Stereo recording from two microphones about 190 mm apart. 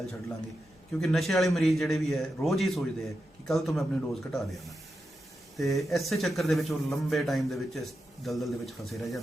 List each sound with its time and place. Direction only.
0.9 s speech: centre (ahead or behind)